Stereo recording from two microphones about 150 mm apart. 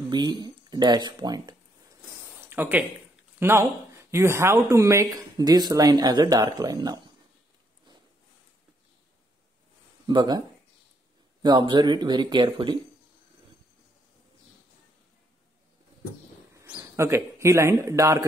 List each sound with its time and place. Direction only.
0.1 s speech: 30° right (ahead or behind)
2.4 s speech: 15° right (ahead or behind)
10.0 s speech: 30° right (ahead or behind)
11.4 s speech: 30° right (ahead or behind)
16.6 s speech: 15° right (ahead or behind)